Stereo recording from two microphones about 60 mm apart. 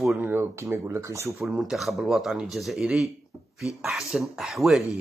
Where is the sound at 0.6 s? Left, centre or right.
Right.